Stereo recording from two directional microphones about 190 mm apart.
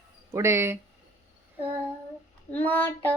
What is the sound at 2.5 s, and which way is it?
Child singing, 10° left (ahead or behind).